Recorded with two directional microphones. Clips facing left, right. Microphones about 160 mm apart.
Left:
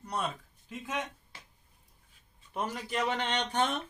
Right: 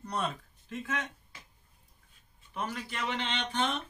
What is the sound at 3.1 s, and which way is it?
Speech, 45° left (ahead or behind).